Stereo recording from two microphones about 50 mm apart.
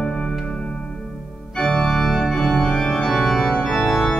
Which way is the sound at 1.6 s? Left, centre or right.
Centre.